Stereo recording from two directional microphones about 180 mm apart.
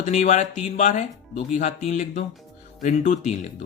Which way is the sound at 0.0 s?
40° left (ahead or behind).